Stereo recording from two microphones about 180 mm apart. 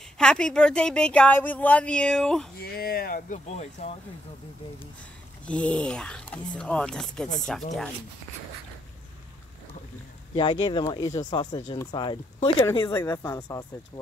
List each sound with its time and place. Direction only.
0.2 s a woman's voice: 5° left (ahead or behind)
2.6 s speech: 60° left (ahead or behind); by 3.9 s 40° left (ahead or behind)
5.5 s a woman's voice: 5° left (ahead or behind)
10.3 s speech: 25° left (ahead or behind)